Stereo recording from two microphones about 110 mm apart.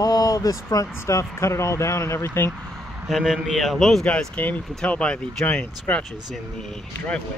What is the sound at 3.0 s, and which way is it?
Speech, 5° right (ahead or behind).